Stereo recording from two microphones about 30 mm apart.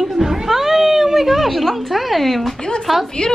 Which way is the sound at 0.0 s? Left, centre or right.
Centre.